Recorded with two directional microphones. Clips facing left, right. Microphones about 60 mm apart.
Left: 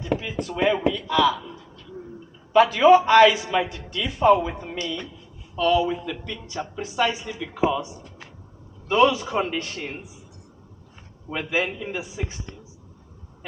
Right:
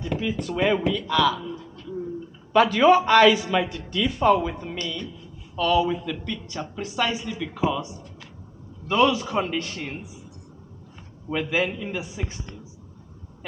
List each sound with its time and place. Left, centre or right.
0.2 s speech: centre
11.3 s speech: centre